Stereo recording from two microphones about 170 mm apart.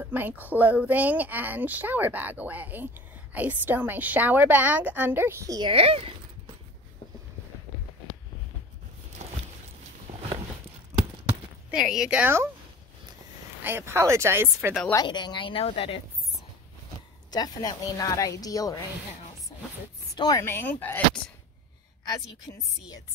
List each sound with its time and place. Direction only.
0.0 s a woman's voice: 10° right (ahead or behind)
5.7 s speech: 35° right (ahead or behind)
9.2 s a sound: 45° right (ahead or behind)
11.7 s speech: 5° right (ahead or behind)
13.6 s a woman's voice: 15° right (ahead or behind)
15.0 s a woman's voice: 25° left (ahead or behind)
17.3 s a woman's voice: 25° left (ahead or behind)
20.2 s speech: 20° left (ahead or behind)
22.5 s a woman's voice: 35° left (ahead or behind)